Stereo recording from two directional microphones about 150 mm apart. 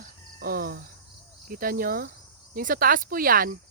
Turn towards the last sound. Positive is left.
turn(degrees=-75)  # may be behind; listen again after turning